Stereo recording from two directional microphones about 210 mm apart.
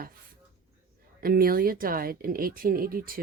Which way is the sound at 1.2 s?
45° right (ahead or behind).